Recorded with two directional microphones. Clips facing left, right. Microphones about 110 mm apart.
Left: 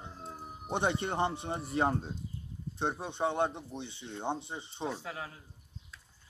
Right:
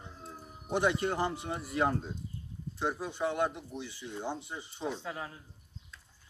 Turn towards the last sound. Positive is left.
turn(degrees=10)  # may be behind; listen again after turning